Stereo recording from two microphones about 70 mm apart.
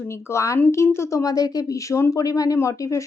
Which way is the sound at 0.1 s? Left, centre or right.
Left.